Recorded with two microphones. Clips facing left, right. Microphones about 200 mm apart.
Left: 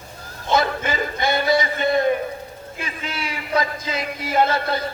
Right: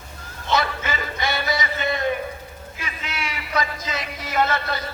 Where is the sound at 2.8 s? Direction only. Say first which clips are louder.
Left 2 dB; 30° left (ahead or behind).